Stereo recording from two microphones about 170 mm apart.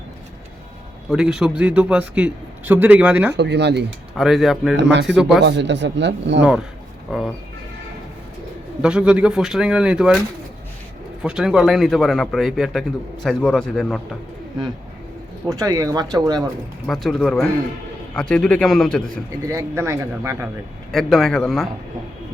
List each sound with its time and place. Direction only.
1.1 s a man's voice: 5° right (ahead or behind)
3.3 s speech: 85° right
4.2 s a man's voice: centre (ahead or behind)
4.8 s speech: 90° right
5.0 s a man's voice: centre (ahead or behind)
5.5 s speech: 90° right
6.4 s a man's voice: 5° right (ahead or behind)
8.8 s a man's voice: 5° right (ahead or behind)
11.2 s a man's voice: 5° right (ahead or behind)
15.4 s speech: 20° right (ahead or behind)
16.8 s a man's voice: centre (ahead or behind)
19.5 s a man's voice: 15° right (ahead or behind)
20.9 s a man's voice: centre (ahead or behind)